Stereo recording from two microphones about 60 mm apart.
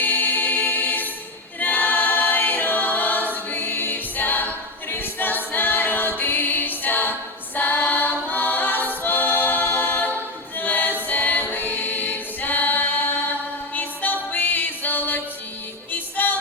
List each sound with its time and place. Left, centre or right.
0.0 s music: left
1.5 s choir: left
3.3 s a capella: left
10.6 s choir: left
11.0 s music: left